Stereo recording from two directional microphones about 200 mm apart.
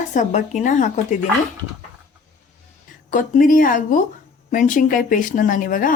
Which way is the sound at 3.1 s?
40° left (ahead or behind).